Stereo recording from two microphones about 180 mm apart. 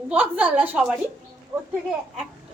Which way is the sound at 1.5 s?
20° right (ahead or behind).